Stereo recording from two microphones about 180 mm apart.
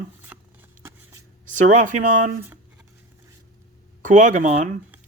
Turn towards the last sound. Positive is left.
turn(degrees=-40)  # may be behind; listen again after turning